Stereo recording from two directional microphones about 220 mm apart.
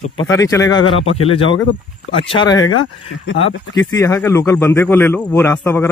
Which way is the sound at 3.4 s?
15° left (ahead or behind).